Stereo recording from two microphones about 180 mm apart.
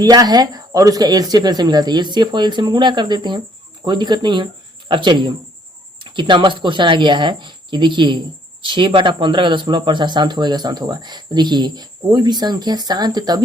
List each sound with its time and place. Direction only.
0.0 s speech: 20° right (ahead or behind)